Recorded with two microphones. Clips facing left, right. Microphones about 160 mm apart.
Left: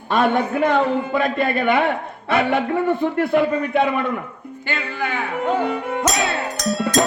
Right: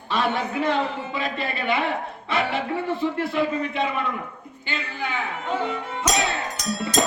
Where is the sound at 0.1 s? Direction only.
50° left (ahead or behind).